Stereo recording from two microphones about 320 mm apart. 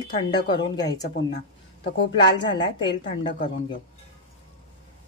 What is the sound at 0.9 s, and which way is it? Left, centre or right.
Speech, left.